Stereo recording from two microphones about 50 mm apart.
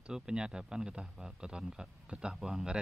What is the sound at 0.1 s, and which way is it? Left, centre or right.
Speech, centre.